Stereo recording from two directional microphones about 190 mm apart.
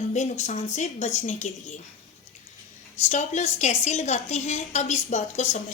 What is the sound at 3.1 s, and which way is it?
A woman's voice, 40° left (ahead or behind).